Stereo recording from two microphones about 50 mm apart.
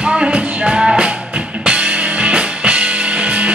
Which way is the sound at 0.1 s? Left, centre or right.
Centre.